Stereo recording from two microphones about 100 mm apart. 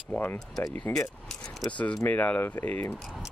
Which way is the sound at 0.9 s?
20° left (ahead or behind).